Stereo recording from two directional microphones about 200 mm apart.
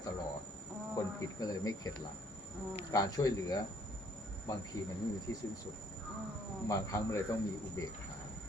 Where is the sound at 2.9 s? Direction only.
20° left (ahead or behind).